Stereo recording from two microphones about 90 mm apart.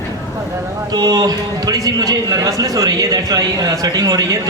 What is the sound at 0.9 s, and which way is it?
A man's voice, 45° right (ahead or behind).